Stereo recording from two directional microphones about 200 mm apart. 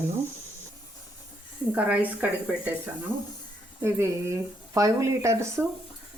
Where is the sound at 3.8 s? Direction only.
15° right (ahead or behind).